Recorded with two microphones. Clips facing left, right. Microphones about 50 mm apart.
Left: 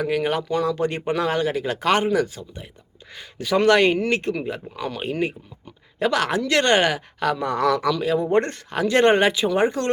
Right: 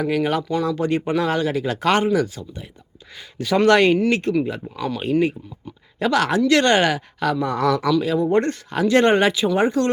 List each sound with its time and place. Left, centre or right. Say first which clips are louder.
0.2 s speech: right 1 dB; left
2.0 s speech: right 1 dB; left
3.4 s speech: right 2 dB; centre
3.9 s speech: right 4 dB; left